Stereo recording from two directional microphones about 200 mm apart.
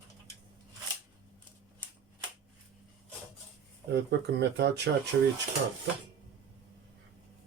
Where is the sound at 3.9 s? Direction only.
60° right (ahead or behind).